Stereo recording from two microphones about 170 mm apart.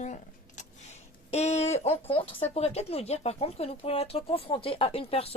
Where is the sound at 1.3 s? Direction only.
40° left (ahead or behind).